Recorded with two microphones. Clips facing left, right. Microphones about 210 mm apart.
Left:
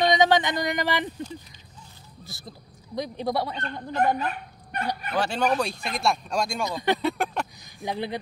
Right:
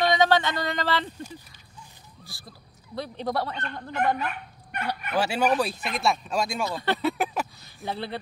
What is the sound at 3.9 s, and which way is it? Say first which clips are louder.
Speech: left 2 dB; 35° left (ahead or behind).